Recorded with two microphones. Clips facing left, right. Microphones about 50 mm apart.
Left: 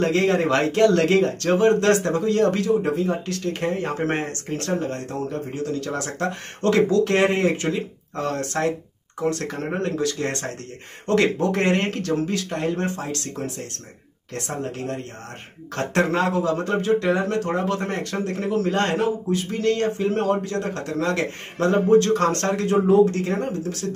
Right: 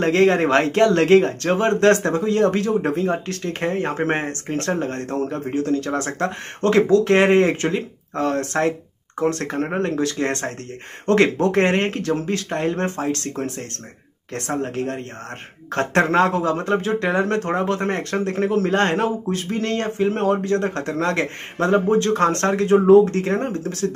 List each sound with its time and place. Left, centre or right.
0.0 s speech: right